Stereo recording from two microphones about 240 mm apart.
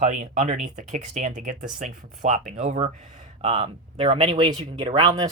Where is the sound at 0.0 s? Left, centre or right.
Right.